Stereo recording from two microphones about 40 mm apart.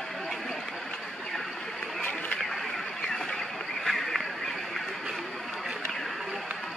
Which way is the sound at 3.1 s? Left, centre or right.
Centre.